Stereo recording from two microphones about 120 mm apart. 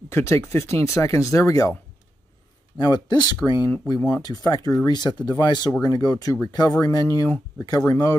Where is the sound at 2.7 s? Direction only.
35° left (ahead or behind).